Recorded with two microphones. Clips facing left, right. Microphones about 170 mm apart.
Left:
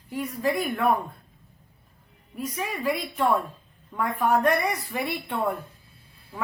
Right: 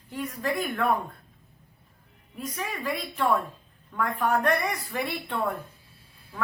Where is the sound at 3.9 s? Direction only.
5° left (ahead or behind).